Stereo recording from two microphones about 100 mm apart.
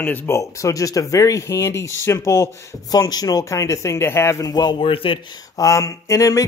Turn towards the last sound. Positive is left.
turn(degrees=35)  # may be behind; listen again after turning